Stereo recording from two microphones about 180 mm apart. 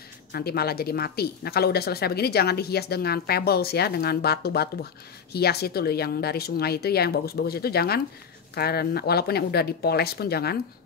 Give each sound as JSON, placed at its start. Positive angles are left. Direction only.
{"t": 0.3, "sound": "speech", "side_deg": 60}